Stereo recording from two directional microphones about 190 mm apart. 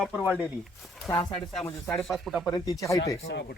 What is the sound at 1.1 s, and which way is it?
Speech, 25° left (ahead or behind).